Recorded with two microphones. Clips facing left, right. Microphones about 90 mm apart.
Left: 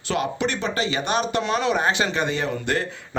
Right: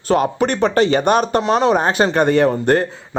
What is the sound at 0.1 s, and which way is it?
Speech, 45° right (ahead or behind).